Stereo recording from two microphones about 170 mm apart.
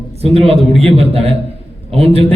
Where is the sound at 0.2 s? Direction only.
35° right (ahead or behind).